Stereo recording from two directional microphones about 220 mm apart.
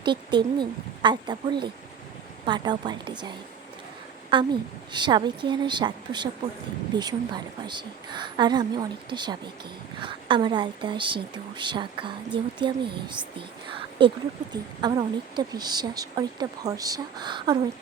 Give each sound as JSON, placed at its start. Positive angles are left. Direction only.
{"t": 0.0, "sound": "speech", "side_deg": -20}